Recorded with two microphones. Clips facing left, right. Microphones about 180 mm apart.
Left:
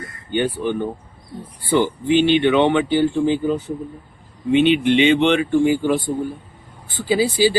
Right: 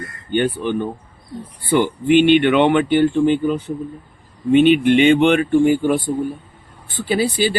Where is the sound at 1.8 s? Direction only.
60° right (ahead or behind).